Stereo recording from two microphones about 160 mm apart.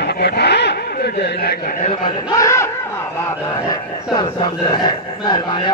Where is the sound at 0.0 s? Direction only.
90° left.